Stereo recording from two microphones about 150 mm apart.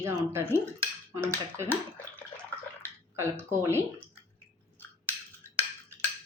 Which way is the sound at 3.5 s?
15° right (ahead or behind).